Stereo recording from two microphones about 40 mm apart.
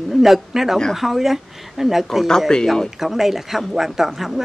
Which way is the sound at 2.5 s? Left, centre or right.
Centre.